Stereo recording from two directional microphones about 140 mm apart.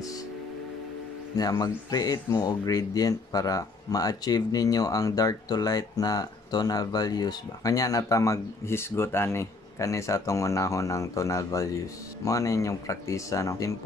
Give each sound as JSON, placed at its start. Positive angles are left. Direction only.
{"t": 1.4, "sound": "speech", "side_deg": 25}